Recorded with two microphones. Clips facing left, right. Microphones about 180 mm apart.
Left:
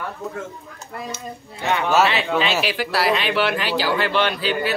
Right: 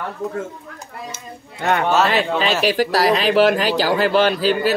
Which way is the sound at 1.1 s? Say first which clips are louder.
Left 2 dB; 50° right (ahead or behind).